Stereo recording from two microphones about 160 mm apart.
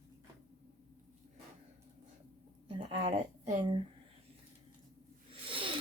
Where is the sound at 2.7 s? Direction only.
40° right (ahead or behind).